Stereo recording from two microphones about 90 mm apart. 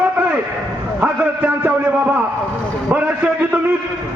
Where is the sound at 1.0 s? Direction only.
15° right (ahead or behind).